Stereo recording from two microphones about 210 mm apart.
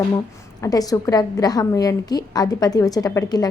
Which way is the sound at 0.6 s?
15° left (ahead or behind).